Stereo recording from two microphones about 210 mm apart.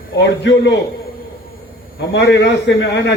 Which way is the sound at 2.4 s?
55° left (ahead or behind).